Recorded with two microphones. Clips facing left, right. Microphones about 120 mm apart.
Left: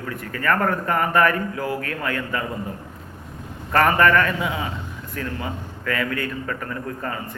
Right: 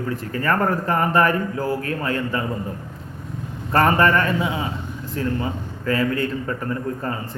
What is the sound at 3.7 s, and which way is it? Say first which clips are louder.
A man's voice: even; 30° right (ahead or behind).